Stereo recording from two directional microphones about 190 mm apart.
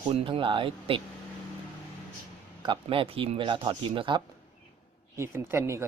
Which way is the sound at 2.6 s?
30° right (ahead or behind).